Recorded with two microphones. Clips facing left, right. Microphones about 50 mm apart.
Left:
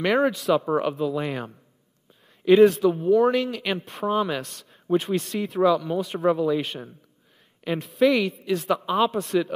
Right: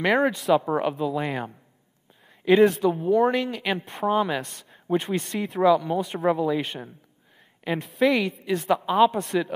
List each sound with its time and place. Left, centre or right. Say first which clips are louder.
0.0 s speech: even; centre